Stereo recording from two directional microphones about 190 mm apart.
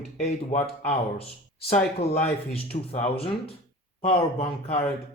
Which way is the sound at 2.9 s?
30° left (ahead or behind).